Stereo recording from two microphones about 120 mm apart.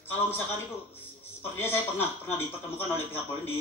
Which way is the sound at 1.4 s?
20° left (ahead or behind).